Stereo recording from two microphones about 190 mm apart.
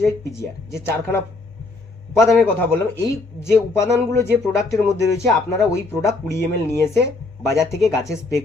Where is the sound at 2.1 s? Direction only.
Centre (ahead or behind).